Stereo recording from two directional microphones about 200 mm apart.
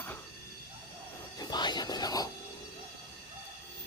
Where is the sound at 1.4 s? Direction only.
20° left (ahead or behind).